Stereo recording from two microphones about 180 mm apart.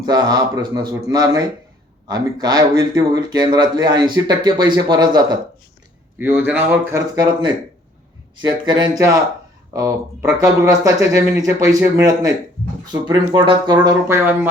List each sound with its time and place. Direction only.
0.0 s speech: 25° right (ahead or behind)
6.1 s speech: 10° right (ahead or behind)